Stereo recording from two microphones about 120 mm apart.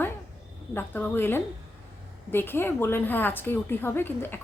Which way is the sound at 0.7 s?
15° left (ahead or behind).